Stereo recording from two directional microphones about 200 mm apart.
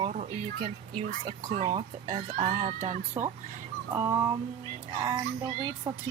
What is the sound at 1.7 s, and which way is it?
Speech, 25° right (ahead or behind).